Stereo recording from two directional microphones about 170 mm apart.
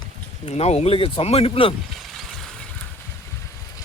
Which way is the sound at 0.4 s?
40° left (ahead or behind).